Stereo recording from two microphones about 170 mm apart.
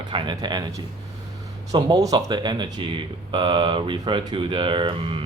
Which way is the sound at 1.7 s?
25° right (ahead or behind).